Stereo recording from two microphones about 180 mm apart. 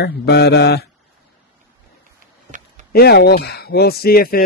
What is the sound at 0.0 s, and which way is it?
Mantra, 65° left (ahead or behind).